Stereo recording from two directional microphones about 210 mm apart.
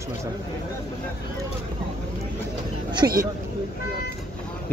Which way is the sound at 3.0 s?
15° right (ahead or behind).